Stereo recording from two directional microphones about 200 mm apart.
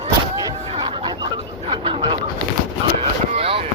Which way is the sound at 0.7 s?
25° right (ahead or behind).